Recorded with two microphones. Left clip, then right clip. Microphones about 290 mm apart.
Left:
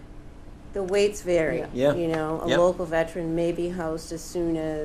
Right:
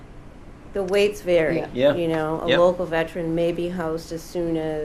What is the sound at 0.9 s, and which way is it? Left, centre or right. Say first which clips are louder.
Speech: right 3 dB; centre.